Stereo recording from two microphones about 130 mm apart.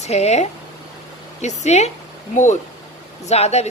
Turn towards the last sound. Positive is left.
turn(degrees=55)  # may be behind; listen again after turning